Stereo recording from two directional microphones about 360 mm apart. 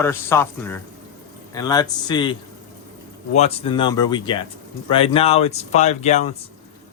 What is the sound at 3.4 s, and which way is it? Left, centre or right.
A man's voice, centre.